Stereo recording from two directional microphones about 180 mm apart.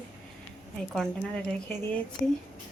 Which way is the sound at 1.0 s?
5° left (ahead or behind).